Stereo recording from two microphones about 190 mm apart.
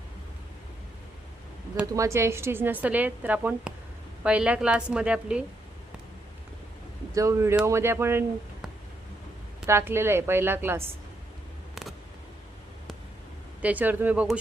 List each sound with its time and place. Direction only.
1.7 s a woman's voice: 10° right (ahead or behind)
7.1 s a woman's voice: 15° right (ahead or behind)
9.6 s a woman's voice: 15° right (ahead or behind)
11.7 s a sound: centre (ahead or behind)
13.6 s a woman's voice: 10° right (ahead or behind)